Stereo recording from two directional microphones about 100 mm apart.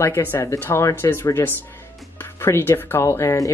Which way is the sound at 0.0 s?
25° left (ahead or behind).